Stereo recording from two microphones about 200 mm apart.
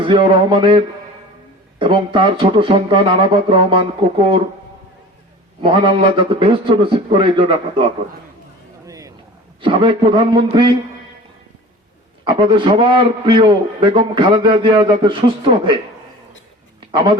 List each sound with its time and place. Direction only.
0.0 s a man's voice: 25° right (ahead or behind)
1.8 s a man's voice: 25° right (ahead or behind)
5.6 s a man's voice: 25° right (ahead or behind)
8.9 s a sound: 15° right (ahead or behind)
9.6 s a man's voice: 25° right (ahead or behind)
12.2 s a man's voice: 25° right (ahead or behind)